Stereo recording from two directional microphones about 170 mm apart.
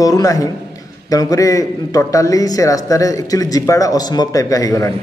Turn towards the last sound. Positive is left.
turn(degrees=20)  # may be behind; listen again after turning